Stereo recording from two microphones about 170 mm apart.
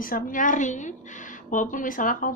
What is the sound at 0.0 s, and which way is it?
A woman's voice, 55° left (ahead or behind).